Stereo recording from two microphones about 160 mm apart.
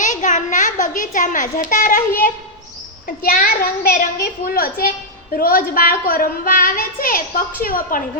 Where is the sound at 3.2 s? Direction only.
65° left (ahead or behind).